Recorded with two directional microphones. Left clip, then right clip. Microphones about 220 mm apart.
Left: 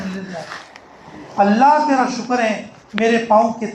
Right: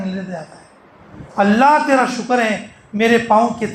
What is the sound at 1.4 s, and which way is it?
A man's voice, 55° right (ahead or behind).